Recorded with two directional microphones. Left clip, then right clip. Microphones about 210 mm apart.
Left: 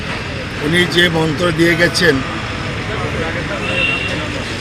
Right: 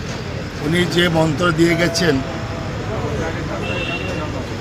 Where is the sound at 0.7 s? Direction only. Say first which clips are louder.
Left 4 dB; 30° right (ahead or behind).